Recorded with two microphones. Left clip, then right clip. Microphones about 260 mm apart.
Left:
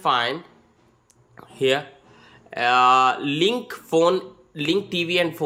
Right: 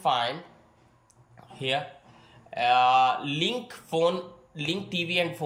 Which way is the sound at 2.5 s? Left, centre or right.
Centre.